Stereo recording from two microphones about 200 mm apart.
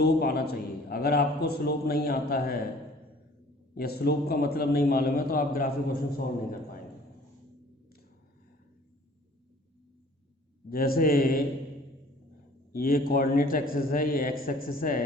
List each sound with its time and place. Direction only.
0.0 s a man's voice: 50° left (ahead or behind)
3.8 s a man's voice: 50° left (ahead or behind)
10.7 s a man's voice: 50° left (ahead or behind)
12.7 s a man's voice: 45° left (ahead or behind)